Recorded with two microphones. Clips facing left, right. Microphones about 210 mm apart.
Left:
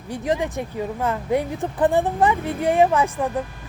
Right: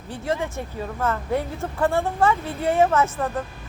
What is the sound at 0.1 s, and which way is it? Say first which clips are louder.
A woman's voice: left 3 dB; 15° left (ahead or behind).